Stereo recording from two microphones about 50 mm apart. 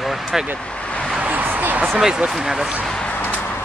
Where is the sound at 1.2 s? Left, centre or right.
Right.